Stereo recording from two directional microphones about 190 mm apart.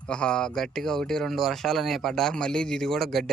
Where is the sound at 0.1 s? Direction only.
5° left (ahead or behind).